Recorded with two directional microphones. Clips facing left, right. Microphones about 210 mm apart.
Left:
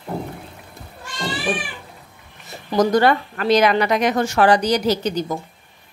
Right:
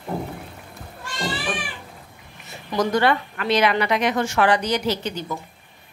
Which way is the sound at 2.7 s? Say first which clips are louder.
Left 4 dB; 40° left (ahead or behind).